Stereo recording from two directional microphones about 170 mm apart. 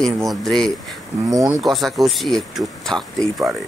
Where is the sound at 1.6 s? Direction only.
Centre (ahead or behind).